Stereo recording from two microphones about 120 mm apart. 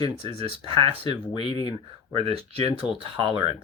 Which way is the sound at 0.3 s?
50° right (ahead or behind).